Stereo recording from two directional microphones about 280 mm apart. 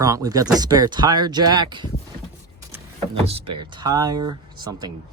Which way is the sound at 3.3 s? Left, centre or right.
Centre.